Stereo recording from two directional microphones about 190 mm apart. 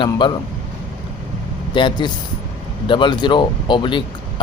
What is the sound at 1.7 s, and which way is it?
A man's voice, 25° left (ahead or behind).